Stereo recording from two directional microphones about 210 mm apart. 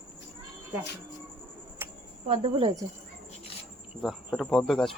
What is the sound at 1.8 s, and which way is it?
Cricket, 10° right (ahead or behind).